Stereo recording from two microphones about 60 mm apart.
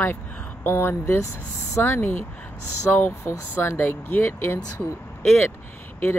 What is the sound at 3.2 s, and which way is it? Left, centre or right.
Speech, left.